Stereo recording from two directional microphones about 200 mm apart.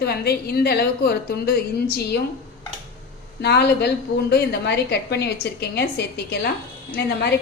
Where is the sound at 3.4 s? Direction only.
55° left (ahead or behind).